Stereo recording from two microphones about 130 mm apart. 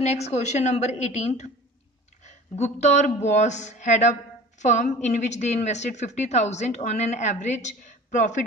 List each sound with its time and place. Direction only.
0.0 s a woman's voice: 60° left (ahead or behind)